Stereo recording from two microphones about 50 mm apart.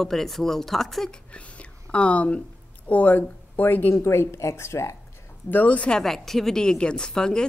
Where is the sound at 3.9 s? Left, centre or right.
Left.